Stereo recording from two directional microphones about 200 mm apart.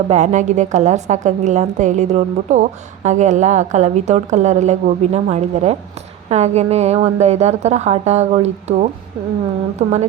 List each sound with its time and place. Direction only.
0.1 s a woman's voice: 35° right (ahead or behind)